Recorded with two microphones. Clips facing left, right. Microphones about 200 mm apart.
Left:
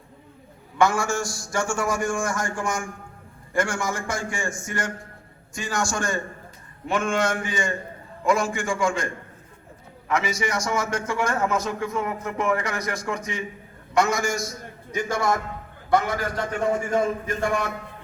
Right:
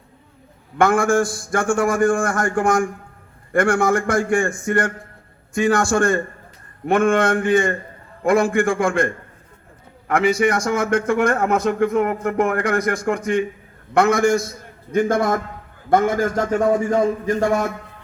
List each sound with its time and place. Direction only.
0.8 s a man's voice: 55° right (ahead or behind)
10.1 s a man's voice: 55° right (ahead or behind); by 17.7 s 40° right (ahead or behind)